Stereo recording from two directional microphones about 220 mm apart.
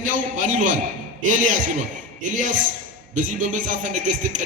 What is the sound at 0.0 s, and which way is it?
A man's voice, 35° right (ahead or behind).